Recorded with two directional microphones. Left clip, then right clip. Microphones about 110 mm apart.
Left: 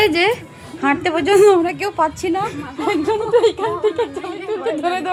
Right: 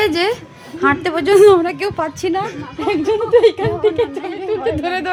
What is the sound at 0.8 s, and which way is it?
A woman's voice, 20° right (ahead or behind).